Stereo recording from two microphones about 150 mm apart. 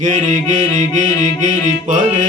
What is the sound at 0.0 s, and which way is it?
Music, 55° right (ahead or behind).